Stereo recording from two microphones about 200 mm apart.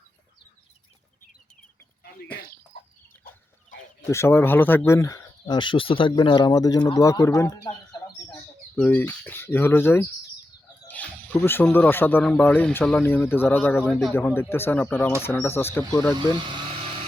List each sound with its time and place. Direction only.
4.1 s speech: 10° left (ahead or behind)
8.7 s speech: 5° left (ahead or behind)